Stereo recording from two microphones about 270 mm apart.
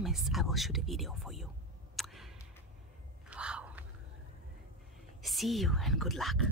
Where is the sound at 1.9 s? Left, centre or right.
Centre.